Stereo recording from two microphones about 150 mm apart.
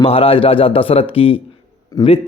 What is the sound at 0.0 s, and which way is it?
A man's voice, 40° left (ahead or behind).